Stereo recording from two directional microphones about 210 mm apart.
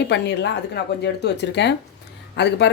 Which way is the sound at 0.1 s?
55° left (ahead or behind).